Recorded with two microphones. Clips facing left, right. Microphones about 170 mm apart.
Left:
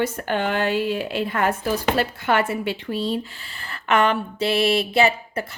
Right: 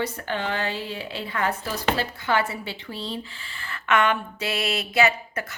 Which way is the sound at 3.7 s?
35° left (ahead or behind).